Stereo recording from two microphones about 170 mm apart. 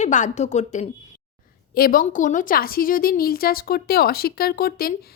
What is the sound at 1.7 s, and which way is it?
A woman's voice, 60° left (ahead or behind).